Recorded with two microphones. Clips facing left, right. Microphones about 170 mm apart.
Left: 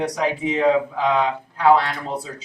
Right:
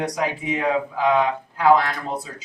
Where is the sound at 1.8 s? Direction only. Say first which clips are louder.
Even; 30° left (ahead or behind).